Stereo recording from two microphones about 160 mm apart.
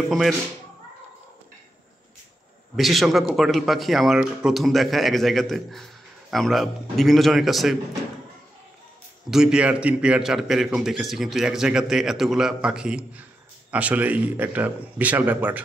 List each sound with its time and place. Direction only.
0.1 s a man's voice: centre (ahead or behind)
2.7 s a man's voice: centre (ahead or behind)
9.3 s a man's voice: 5° right (ahead or behind)